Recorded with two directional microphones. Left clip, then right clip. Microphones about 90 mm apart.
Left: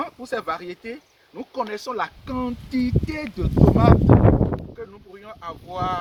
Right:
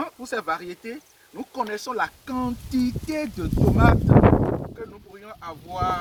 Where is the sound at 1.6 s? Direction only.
85° left.